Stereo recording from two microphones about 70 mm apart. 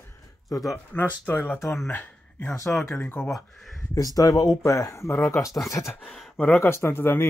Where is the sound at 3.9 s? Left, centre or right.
Left.